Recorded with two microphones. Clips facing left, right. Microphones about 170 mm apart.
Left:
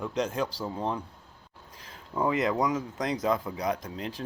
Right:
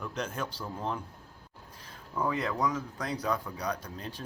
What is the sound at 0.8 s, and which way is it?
Speech, centre (ahead or behind).